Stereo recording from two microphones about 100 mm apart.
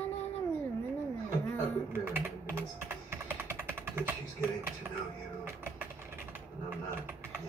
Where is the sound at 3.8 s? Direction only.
25° right (ahead or behind).